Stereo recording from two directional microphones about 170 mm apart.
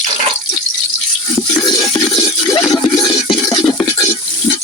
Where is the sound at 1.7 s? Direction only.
25° left (ahead or behind).